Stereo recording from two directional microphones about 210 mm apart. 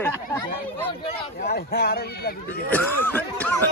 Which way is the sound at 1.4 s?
50° left (ahead or behind).